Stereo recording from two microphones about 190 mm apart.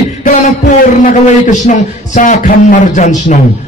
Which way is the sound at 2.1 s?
40° left (ahead or behind).